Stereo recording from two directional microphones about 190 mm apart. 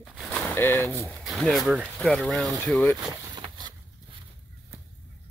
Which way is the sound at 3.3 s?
25° right (ahead or behind).